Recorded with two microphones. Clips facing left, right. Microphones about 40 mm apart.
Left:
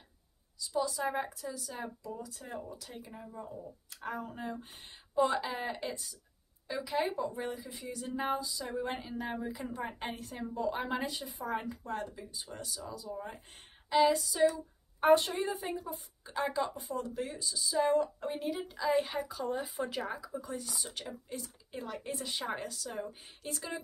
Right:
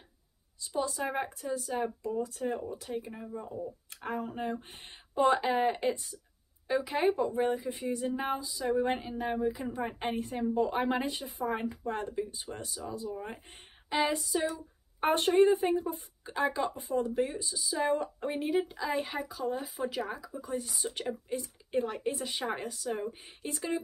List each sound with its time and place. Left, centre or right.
0.7 s speech: right
2.4 s a woman's voice: centre
3.9 s speech: right
8.1 s a woman's voice: centre
8.4 s a woman's voice: centre
15.0 s speech: right
16.3 s a woman's voice: right
18.0 s speech: right
18.7 s speech: centre
20.5 s speech: centre
21.7 s speech: right
22.1 s a woman's voice: centre